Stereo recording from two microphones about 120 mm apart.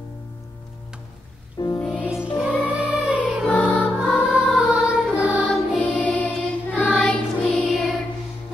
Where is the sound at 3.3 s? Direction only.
Centre (ahead or behind).